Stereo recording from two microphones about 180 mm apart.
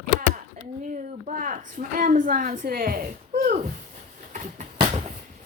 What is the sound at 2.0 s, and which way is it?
Speech, 45° right (ahead or behind).